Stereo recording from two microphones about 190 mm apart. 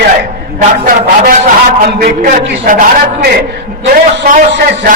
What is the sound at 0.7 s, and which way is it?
A man's voice, 45° right (ahead or behind).